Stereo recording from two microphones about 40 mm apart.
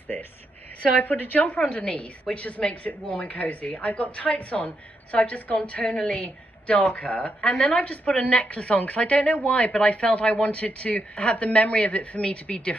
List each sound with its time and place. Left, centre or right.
1.0 s a woman's voice: left
1.6 s a woman's voice: left